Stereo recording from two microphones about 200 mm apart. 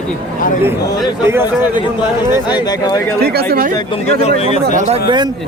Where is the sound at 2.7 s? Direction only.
20° left (ahead or behind).